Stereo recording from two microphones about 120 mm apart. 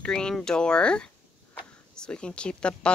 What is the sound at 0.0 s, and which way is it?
Speech, 5° left (ahead or behind).